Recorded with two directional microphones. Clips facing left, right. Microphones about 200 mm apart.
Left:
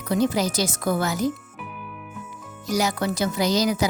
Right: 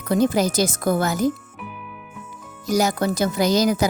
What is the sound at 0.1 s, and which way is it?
Speech, 50° right (ahead or behind).